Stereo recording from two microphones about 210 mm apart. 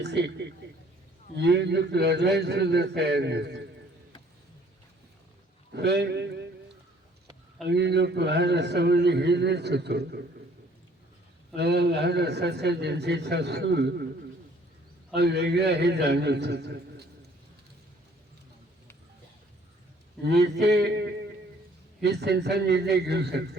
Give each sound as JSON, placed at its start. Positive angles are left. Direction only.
{"t": 0.0, "sound": "a man's voice", "side_deg": -55}
{"t": 5.7, "sound": "a man's voice", "side_deg": -55}
{"t": 7.7, "sound": "a man's voice", "side_deg": -55}
{"t": 11.5, "sound": "a man's voice", "side_deg": -50}
{"t": 15.1, "sound": "a man's voice", "side_deg": -55}
{"t": 20.2, "sound": "a man's voice", "side_deg": -50}